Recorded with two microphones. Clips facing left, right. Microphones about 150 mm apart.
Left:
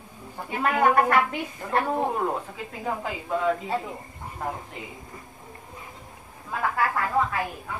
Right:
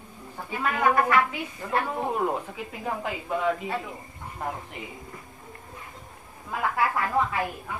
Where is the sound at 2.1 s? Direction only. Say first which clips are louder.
Even; 10° right (ahead or behind).